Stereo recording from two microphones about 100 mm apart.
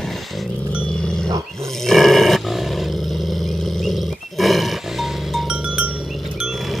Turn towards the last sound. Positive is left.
turn(degrees=-5)  # may be behind; listen again after turning